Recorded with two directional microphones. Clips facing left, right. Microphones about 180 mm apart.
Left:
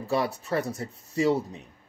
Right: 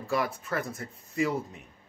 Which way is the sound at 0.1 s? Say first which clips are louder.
Left 3 dB; 30° left (ahead or behind).